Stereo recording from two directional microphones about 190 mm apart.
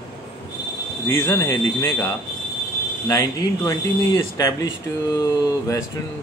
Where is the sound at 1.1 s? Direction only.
15° left (ahead or behind).